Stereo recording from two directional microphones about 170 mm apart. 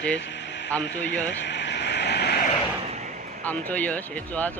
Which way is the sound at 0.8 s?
90° left.